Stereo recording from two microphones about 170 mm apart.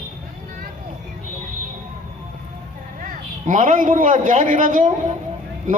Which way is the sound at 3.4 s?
50° right (ahead or behind).